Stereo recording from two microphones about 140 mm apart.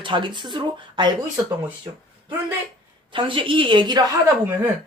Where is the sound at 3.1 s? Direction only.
40° right (ahead or behind).